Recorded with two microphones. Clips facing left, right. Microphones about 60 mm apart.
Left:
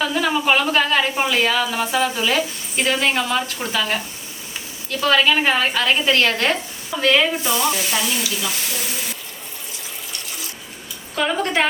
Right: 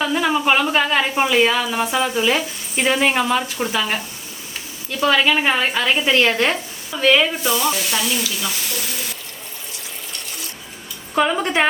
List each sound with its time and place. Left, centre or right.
0.0 s a woman's voice: centre
10.1 s water: centre
11.1 s speech: centre